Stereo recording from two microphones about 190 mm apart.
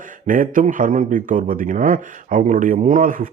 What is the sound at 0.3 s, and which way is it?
A man's voice, 45° right (ahead or behind).